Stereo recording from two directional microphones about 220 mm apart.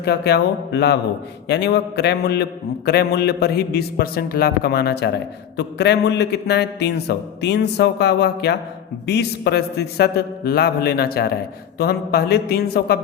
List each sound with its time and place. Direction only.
0.0 s a man's voice: 50° left (ahead or behind)